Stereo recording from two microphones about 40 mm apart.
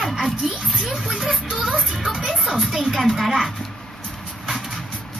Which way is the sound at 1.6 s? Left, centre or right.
Right.